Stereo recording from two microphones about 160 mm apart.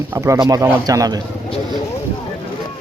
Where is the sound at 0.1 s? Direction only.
20° right (ahead or behind).